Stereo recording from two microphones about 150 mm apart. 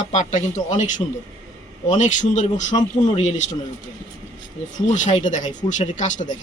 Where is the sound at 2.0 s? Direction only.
55° left (ahead or behind).